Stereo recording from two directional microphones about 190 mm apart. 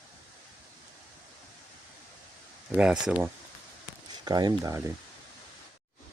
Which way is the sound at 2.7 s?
5° right (ahead or behind).